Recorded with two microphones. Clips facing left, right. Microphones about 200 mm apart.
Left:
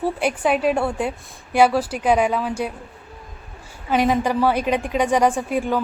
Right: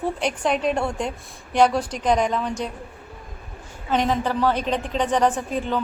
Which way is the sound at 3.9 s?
10° left (ahead or behind).